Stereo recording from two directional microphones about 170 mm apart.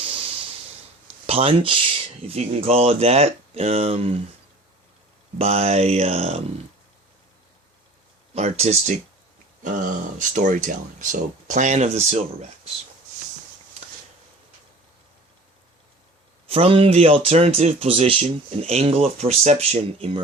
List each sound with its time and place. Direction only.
0.0 s snort: 35° right (ahead or behind)
1.3 s speech: 35° right (ahead or behind)
5.4 s speech: 40° right (ahead or behind)
8.4 s speech: 40° right (ahead or behind)
16.5 s speech: 35° right (ahead or behind)